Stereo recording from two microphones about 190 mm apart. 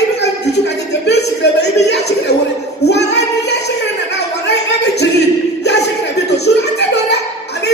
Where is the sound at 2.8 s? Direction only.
60° left (ahead or behind).